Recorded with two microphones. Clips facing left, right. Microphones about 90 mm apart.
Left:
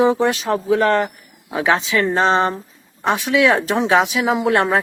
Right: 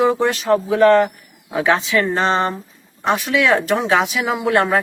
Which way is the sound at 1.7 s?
20° left (ahead or behind).